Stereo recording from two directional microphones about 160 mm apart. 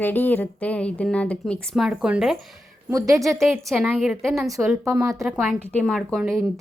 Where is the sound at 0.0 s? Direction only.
10° left (ahead or behind).